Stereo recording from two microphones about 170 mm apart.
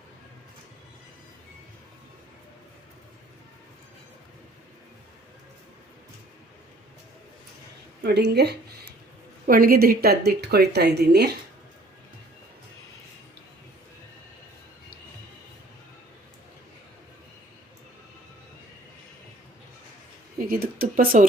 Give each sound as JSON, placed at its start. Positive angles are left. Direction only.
{"t": 8.0, "sound": "speech", "side_deg": -80}
{"t": 9.5, "sound": "speech", "side_deg": -60}
{"t": 20.4, "sound": "a sound", "side_deg": -60}